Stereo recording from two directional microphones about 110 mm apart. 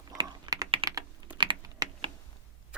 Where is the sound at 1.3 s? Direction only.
45° right (ahead or behind).